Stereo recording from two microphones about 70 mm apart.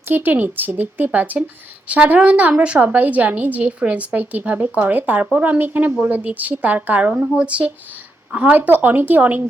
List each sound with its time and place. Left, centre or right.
0.1 s a woman's voice: right